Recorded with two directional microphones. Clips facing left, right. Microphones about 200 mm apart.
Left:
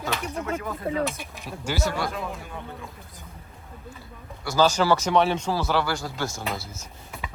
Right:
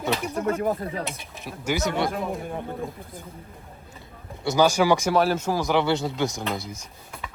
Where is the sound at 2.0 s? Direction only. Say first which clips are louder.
Right 4 dB; 50° right (ahead or behind).